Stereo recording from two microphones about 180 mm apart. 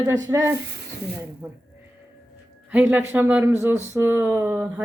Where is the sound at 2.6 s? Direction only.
5° right (ahead or behind).